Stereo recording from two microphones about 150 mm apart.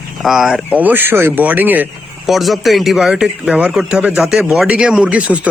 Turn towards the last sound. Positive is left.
turn(degrees=-10)  # may be behind; listen again after turning